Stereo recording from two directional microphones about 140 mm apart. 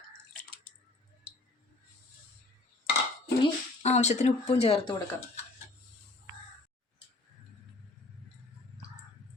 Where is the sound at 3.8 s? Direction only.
55° left (ahead or behind).